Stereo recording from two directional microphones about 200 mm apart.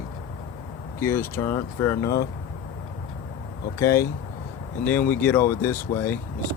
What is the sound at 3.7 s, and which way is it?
Speech, 15° left (ahead or behind).